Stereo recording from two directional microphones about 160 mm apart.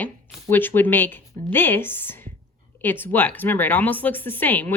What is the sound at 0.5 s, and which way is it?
Speech, 10° left (ahead or behind).